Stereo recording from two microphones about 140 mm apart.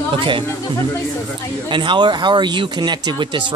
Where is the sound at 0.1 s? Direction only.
35° right (ahead or behind).